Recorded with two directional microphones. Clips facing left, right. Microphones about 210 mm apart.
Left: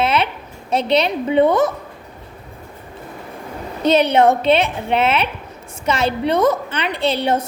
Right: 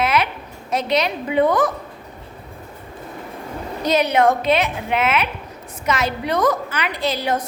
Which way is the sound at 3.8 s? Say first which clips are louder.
Left 3 dB; 30° left (ahead or behind).